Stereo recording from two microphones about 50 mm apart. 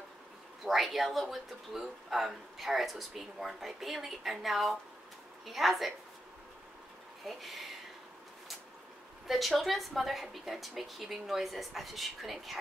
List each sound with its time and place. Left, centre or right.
0.7 s speech: centre
7.2 s speech: centre
9.3 s speech: centre